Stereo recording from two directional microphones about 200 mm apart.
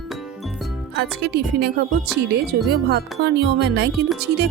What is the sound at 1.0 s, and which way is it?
Speech, 55° right (ahead or behind).